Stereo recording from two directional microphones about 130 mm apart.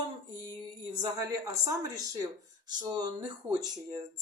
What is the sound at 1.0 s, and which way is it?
Speech, 25° right (ahead or behind).